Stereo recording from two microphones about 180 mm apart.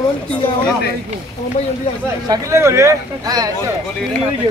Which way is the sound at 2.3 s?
15° right (ahead or behind).